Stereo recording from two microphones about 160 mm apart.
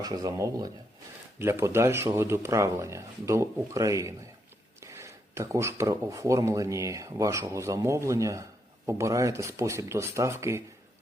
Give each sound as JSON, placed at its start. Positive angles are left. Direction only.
{"t": 0.0, "sound": "speech", "side_deg": -25}